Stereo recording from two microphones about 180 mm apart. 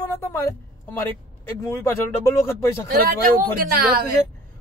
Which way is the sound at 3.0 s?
55° right (ahead or behind).